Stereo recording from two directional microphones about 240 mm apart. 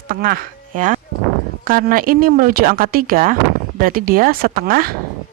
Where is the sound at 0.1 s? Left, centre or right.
Right.